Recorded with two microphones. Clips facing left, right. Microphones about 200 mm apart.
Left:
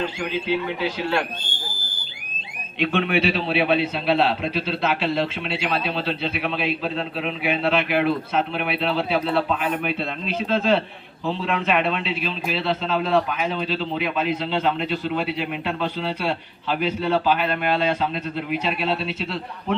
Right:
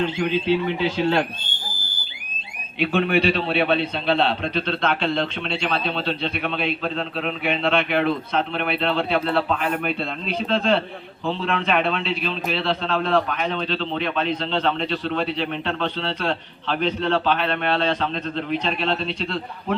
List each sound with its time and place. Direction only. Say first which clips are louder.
0.8 s speech: right 3 dB; 25° right (ahead or behind)
2.7 s a man's voice: right 1 dB; 5° right (ahead or behind)